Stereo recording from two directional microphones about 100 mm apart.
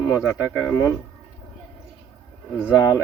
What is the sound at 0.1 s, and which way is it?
Speech, 15° right (ahead or behind).